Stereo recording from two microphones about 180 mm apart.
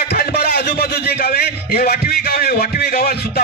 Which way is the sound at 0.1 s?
60° left (ahead or behind).